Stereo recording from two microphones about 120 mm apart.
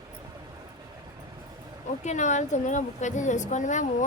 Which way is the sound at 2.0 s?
85° left.